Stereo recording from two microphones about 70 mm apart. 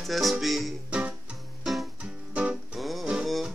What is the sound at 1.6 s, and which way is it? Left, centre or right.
Music, centre.